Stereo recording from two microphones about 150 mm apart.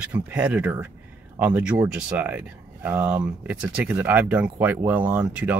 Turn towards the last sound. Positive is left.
turn(degrees=-10)  # may be behind; listen again after turning